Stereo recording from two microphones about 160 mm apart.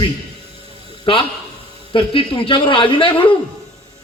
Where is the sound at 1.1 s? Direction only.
35° left (ahead or behind).